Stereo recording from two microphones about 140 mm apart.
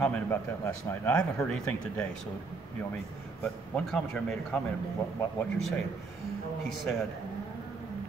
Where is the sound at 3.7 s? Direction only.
5° left (ahead or behind).